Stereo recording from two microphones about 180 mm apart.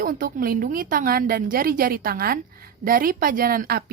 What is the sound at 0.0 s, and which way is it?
A woman's voice, 50° right (ahead or behind).